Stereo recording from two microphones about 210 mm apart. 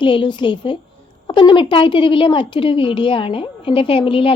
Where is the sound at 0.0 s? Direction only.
25° left (ahead or behind).